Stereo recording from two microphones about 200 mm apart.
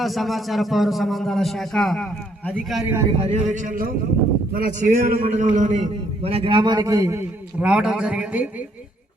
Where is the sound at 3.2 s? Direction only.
35° right (ahead or behind).